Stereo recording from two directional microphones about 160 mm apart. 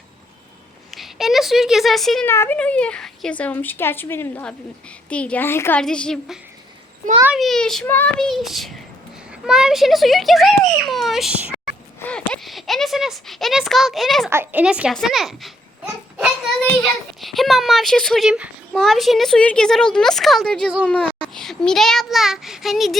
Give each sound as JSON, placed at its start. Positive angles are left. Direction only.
{"t": 0.9, "sound": "speech", "side_deg": 0}
{"t": 2.2, "sound": "a child's voice", "side_deg": 15}
{"t": 11.9, "sound": "a sound", "side_deg": 5}
{"t": 14.3, "sound": "a woman's voice", "side_deg": -15}
{"t": 17.2, "sound": "a child's voice", "side_deg": 0}